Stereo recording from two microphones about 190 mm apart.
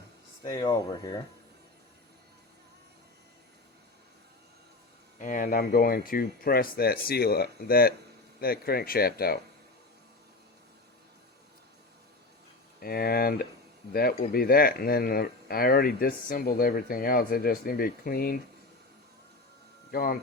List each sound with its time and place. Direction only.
0.4 s speech: 20° left (ahead or behind)
5.2 s speech: 45° left (ahead or behind)
12.8 s speech: 50° left (ahead or behind)
19.9 s speech: 50° left (ahead or behind)